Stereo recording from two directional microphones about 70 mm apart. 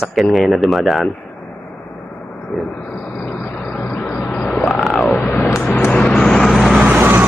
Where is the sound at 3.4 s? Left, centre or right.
Left.